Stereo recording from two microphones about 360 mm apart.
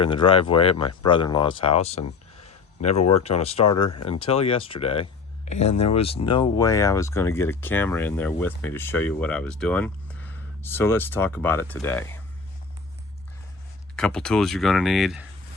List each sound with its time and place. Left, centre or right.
0.0 s speech: centre
3.1 s speech: centre
13.9 s speech: centre